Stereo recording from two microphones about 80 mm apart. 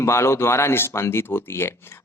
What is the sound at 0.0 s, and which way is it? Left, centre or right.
Speech, left.